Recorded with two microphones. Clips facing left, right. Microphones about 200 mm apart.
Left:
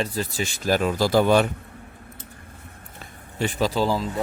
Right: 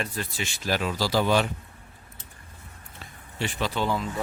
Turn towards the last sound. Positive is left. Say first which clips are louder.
# left 4 dB
turn(degrees=35)  # may be behind; listen again after turning